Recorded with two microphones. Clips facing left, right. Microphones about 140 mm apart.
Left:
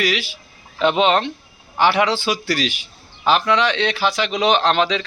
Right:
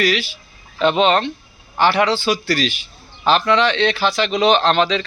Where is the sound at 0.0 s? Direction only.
15° left (ahead or behind).